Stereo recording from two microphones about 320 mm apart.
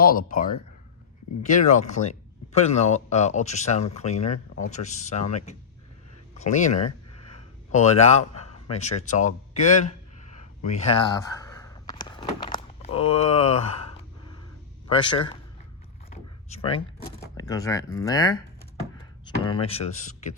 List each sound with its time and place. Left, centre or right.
0.0 s speech: left
10.7 s a sound: centre
14.8 s a man's voice: centre
16.5 s speech: centre
19.5 s speech: centre